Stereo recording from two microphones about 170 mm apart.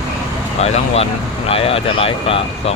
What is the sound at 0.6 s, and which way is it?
Speech, 40° left (ahead or behind).